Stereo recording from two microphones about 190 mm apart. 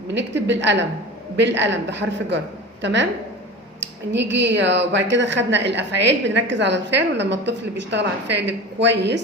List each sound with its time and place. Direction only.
0.1 s a woman's voice: 70° right (ahead or behind)
4.1 s a woman's voice: 70° right (ahead or behind)